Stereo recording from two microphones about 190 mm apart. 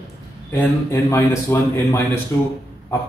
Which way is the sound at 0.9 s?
15° left (ahead or behind).